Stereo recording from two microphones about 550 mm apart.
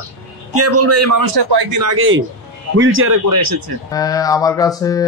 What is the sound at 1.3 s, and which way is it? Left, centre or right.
Speech, right.